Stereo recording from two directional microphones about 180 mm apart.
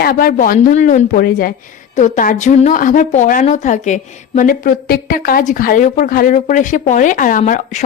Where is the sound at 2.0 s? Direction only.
40° left (ahead or behind).